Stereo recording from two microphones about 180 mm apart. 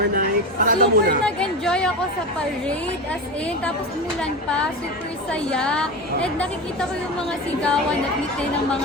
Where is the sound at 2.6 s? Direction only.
5° left (ahead or behind).